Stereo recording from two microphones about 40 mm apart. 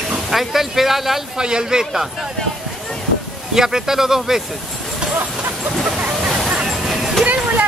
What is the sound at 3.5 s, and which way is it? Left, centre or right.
Speech, centre.